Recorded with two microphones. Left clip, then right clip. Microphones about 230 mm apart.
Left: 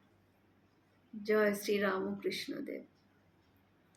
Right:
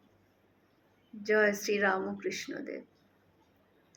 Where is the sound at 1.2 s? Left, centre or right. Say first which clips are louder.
Right 4 dB; centre.